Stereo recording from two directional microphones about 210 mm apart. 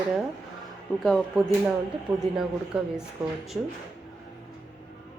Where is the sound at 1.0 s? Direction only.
Centre (ahead or behind).